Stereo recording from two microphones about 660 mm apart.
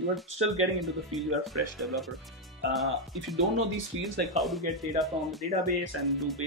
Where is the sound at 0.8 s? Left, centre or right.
Centre.